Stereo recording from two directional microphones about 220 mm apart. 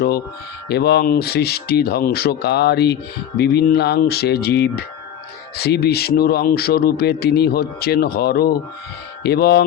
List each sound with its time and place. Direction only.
0.7 s speech: 45° left (ahead or behind)